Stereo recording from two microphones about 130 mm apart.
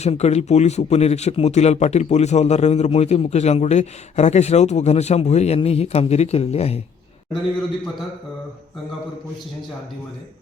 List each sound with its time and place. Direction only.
0.0 s speech: 55° left (ahead or behind)